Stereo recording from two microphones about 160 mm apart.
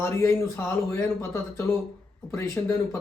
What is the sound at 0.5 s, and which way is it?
A man's voice, 15° left (ahead or behind).